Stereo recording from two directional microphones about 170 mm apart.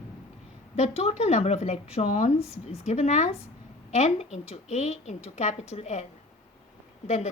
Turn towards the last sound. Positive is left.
turn(degrees=40)  # may be behind; listen again after turning